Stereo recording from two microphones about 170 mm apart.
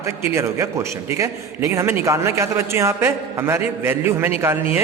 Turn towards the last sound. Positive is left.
turn(degrees=-15)  # may be behind; listen again after turning